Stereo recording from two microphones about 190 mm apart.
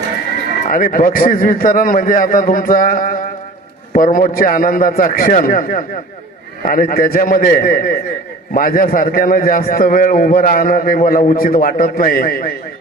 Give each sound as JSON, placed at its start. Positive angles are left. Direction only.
{"t": 0.7, "sound": "a man's voice", "side_deg": 45}